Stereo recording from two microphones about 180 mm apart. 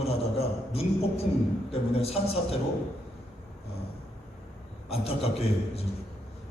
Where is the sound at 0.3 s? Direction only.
35° left (ahead or behind).